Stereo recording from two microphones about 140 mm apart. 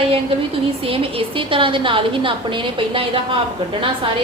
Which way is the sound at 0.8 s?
40° right (ahead or behind).